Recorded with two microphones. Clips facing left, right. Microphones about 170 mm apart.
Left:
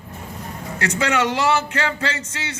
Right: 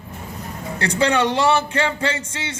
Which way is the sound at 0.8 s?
30° right (ahead or behind).